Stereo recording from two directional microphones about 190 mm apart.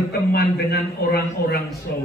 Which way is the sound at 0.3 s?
55° left (ahead or behind).